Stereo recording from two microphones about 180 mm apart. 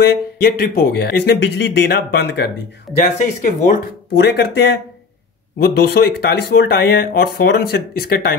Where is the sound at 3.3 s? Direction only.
45° left (ahead or behind).